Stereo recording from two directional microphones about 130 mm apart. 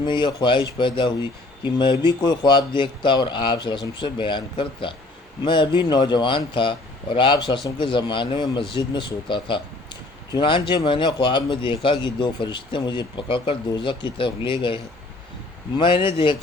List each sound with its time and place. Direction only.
0.0 s speech: 35° left (ahead or behind)
15.8 s speech: 40° left (ahead or behind)